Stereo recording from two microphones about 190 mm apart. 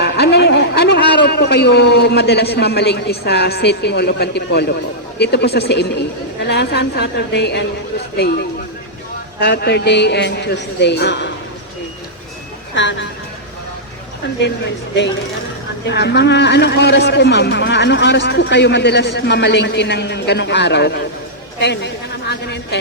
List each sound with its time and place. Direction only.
0.0 s a man's voice: 60° left (ahead or behind)
12.7 s speech: 70° left (ahead or behind)
15.9 s a man's voice: 65° left (ahead or behind)